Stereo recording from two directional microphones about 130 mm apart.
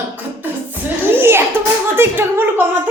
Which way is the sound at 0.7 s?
15° right (ahead or behind).